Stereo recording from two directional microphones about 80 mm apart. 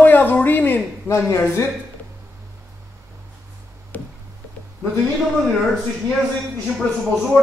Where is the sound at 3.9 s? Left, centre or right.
Centre.